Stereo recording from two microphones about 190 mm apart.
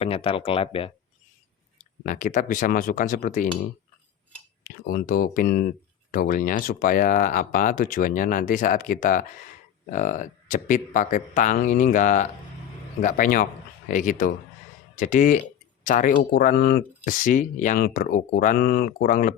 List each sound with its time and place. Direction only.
0.0 s speech: 30° left (ahead or behind)
2.0 s speech: 40° left (ahead or behind)